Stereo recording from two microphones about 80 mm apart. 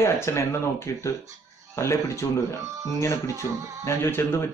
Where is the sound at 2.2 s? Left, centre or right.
Left.